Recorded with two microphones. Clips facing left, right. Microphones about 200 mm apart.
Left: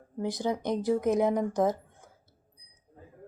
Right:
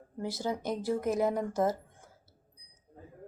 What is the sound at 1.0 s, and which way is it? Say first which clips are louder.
Speech: left 2 dB; centre (ahead or behind).